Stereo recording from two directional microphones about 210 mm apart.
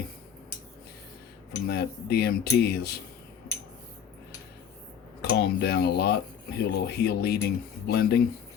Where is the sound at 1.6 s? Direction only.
50° left (ahead or behind).